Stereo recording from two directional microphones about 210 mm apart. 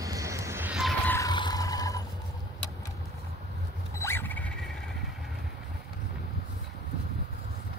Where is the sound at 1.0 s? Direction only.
15° left (ahead or behind).